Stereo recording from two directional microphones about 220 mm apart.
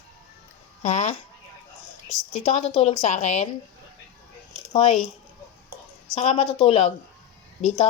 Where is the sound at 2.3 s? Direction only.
30° left (ahead or behind).